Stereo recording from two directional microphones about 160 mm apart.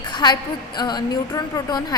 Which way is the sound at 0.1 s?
25° left (ahead or behind).